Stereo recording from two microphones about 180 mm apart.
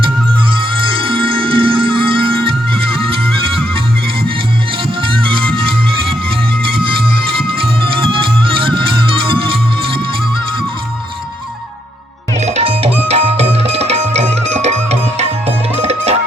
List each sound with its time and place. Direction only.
0.5 s music: 30° right (ahead or behind)
5.2 s music: 30° right (ahead or behind)
7.4 s music: 30° right (ahead or behind)
12.4 s music: 35° right (ahead or behind)